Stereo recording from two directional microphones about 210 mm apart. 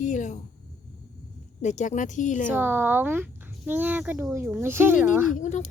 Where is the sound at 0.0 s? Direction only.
35° left (ahead or behind).